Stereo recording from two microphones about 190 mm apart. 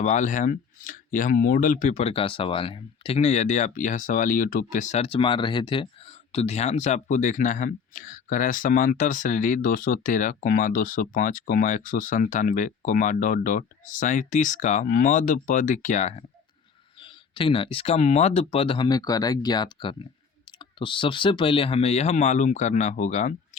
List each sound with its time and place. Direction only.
0.0 s speech: 40° left (ahead or behind)
17.0 s speech: 25° left (ahead or behind)